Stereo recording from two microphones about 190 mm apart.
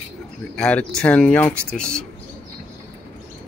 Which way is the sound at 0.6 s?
5° left (ahead or behind).